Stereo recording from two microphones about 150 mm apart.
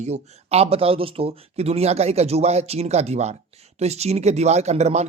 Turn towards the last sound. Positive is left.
turn(degrees=-45)  # may be behind; listen again after turning